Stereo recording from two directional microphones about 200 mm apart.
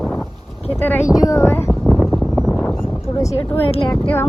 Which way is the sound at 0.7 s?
10° left (ahead or behind).